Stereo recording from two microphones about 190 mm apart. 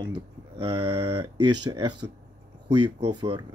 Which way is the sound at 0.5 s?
30° right (ahead or behind).